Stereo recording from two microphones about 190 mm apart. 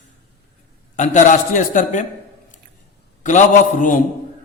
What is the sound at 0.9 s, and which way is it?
A man's voice, 40° left (ahead or behind).